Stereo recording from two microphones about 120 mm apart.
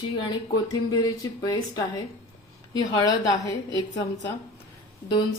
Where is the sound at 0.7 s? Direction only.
30° left (ahead or behind).